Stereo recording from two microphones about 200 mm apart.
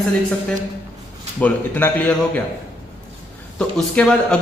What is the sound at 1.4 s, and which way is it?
Speech, 10° left (ahead or behind).